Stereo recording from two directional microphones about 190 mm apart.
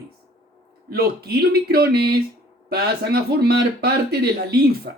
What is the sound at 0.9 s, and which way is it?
Speech, 55° right (ahead or behind).